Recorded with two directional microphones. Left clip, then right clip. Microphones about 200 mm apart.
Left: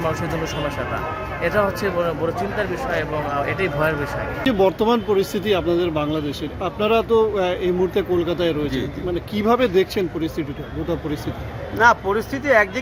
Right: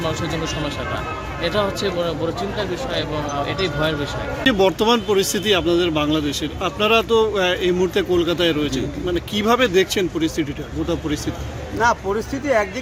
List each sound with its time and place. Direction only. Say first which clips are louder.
3.4 s speech: even; 5° right (ahead or behind)
11.8 s speech: left 3 dB; centre (ahead or behind)